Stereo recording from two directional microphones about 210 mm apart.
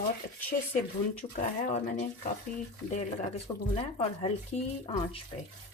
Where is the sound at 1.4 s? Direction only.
35° left (ahead or behind).